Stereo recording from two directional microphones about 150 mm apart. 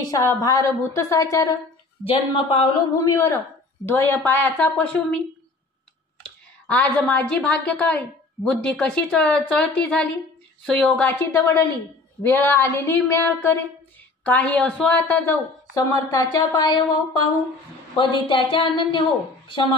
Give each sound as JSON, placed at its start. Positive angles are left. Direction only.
{"t": 0.0, "sound": "speech", "side_deg": 25}
{"t": 2.0, "sound": "a woman's voice", "side_deg": 35}
{"t": 3.0, "sound": "speech", "side_deg": 25}
{"t": 6.7, "sound": "speech", "side_deg": 10}
{"t": 15.7, "sound": "a woman's voice", "side_deg": 25}